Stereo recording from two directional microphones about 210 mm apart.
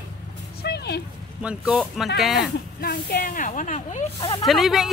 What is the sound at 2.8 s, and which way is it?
Speech, 45° left (ahead or behind).